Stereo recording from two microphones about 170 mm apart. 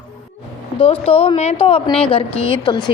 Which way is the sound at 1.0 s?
35° left (ahead or behind).